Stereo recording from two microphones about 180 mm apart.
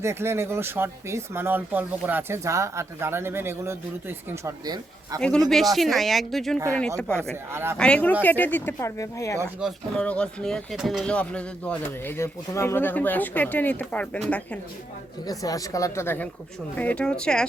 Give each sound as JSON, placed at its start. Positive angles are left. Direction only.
{"t": 0.0, "sound": "speech", "side_deg": -15}
{"t": 5.5, "sound": "speech", "side_deg": 0}
{"t": 7.5, "sound": "speech", "side_deg": -15}
{"t": 7.8, "sound": "speech", "side_deg": 5}
{"t": 9.6, "sound": "speech", "side_deg": 0}
{"t": 15.3, "sound": "speech", "side_deg": 20}